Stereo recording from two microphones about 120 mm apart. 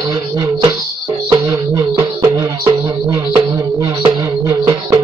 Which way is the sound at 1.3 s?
30° right (ahead or behind).